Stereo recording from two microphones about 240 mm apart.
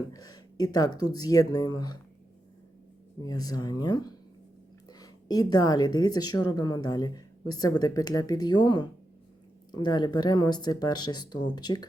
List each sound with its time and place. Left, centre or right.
0.1 s a woman's voice: centre
3.2 s a woman's voice: centre